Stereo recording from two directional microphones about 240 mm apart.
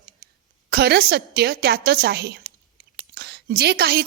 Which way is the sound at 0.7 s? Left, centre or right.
Right.